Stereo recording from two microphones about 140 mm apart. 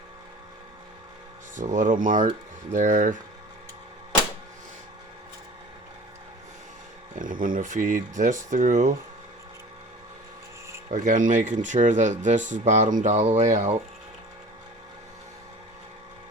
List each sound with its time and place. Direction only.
1.5 s speech: 65° right (ahead or behind)
7.2 s speech: 75° right (ahead or behind)
10.9 s speech: 70° right (ahead or behind)